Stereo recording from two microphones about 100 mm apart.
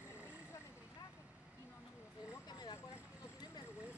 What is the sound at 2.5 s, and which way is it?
Vehicle, 45° left (ahead or behind).